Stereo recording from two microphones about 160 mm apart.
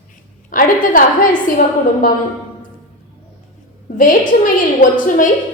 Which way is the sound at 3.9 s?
60° left (ahead or behind).